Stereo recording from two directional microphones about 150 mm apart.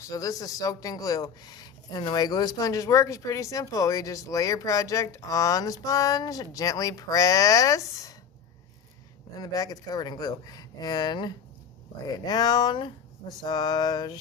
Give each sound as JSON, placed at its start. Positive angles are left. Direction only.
{"t": 0.0, "sound": "speech", "side_deg": 25}
{"t": 9.4, "sound": "speech", "side_deg": 25}